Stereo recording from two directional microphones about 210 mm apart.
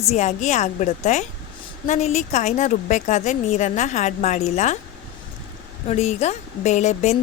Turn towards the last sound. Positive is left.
turn(degrees=35)  # may be behind; listen again after turning